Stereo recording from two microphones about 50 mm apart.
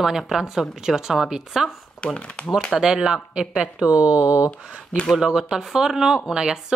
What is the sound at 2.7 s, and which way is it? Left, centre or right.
Speech, centre.